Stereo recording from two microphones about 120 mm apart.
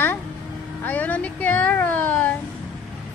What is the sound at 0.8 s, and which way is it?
Speech, 15° left (ahead or behind).